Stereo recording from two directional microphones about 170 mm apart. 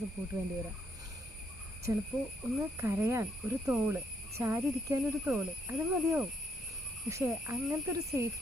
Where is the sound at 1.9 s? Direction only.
15° right (ahead or behind).